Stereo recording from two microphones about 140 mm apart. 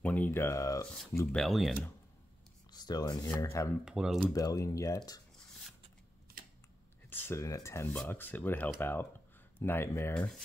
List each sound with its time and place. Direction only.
0.0 s speech: 10° left (ahead or behind)
1.3 s speech: centre (ahead or behind)
2.7 s speech: 30° left (ahead or behind)
3.8 s speech: 5° right (ahead or behind)
4.3 s speech: 25° left (ahead or behind)
7.1 s speech: 15° left (ahead or behind)